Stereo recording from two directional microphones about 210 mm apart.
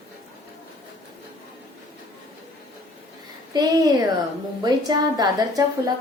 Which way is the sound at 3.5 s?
15° right (ahead or behind).